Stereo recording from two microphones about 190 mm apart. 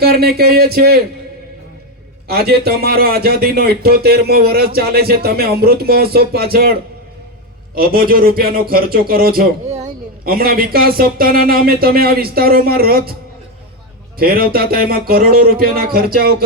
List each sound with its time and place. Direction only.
0.0 s speech: 55° right (ahead or behind)
2.2 s speech: 55° right (ahead or behind)
7.8 s speech: 50° right (ahead or behind)
9.6 s a sound: 35° right (ahead or behind)
10.2 s speech: 50° right (ahead or behind)
14.2 s speech: 50° right (ahead or behind)